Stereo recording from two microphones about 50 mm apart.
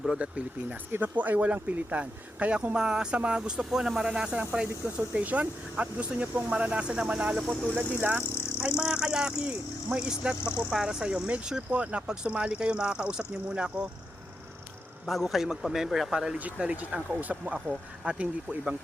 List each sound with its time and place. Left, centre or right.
0.2 s speech: right
0.9 s speech: right
2.7 s speech: centre; by 8.1 s right
8.1 s speech: right
10.7 s speech: centre
15.0 s speech: centre
16.6 s speech: right
18.0 s speech: right